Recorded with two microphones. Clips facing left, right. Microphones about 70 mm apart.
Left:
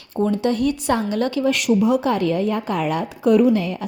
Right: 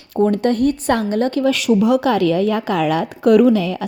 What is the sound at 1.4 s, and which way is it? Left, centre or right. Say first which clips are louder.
A woman's voice: right 2 dB; right.